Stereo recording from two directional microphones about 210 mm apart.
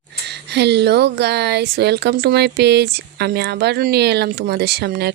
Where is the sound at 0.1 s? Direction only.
55° right (ahead or behind).